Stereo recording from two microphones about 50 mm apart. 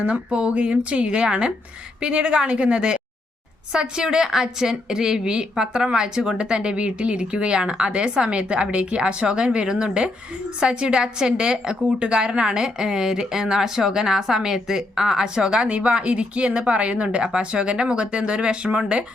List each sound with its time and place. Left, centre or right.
0.0 s a woman's voice: right
15.6 s speech: right